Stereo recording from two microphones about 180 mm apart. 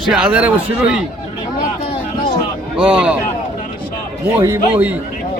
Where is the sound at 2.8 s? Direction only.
5° right (ahead or behind).